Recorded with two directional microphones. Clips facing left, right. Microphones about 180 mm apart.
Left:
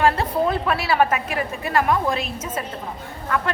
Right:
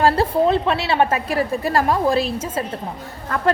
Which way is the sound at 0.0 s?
30° right (ahead or behind).